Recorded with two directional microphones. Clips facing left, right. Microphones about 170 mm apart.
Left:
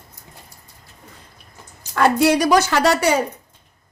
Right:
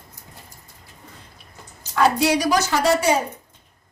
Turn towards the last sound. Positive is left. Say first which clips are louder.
# left 2 dB
turn(degrees=75)  # may be behind; listen again after turning